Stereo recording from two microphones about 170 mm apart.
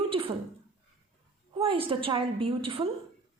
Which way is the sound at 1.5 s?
30° right (ahead or behind).